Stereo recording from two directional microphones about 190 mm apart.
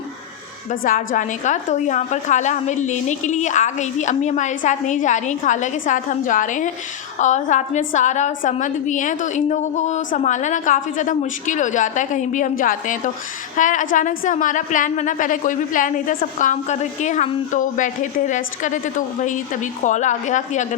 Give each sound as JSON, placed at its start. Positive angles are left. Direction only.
{"t": 0.7, "sound": "a woman's voice", "side_deg": 45}